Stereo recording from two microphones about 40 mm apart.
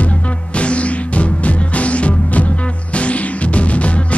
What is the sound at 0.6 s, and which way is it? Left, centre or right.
Music, left.